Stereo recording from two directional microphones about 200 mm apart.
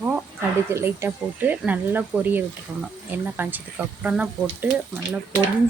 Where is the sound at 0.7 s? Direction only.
10° right (ahead or behind).